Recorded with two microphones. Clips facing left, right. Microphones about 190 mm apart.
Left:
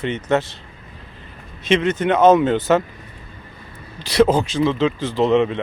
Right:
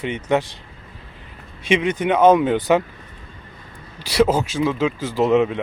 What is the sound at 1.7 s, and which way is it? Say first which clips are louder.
Speech: left 1 dB; 10° right (ahead or behind).